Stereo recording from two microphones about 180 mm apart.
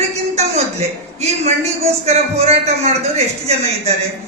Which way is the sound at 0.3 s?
35° right (ahead or behind).